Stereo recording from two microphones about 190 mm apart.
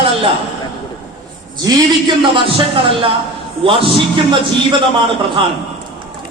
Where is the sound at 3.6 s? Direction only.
30° right (ahead or behind).